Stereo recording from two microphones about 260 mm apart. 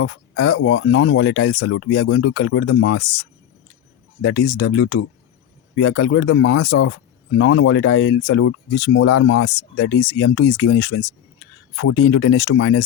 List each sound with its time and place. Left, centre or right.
0.0 s speech: left
4.2 s speech: left